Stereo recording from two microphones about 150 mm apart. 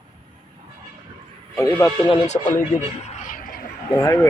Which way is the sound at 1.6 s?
25° left (ahead or behind).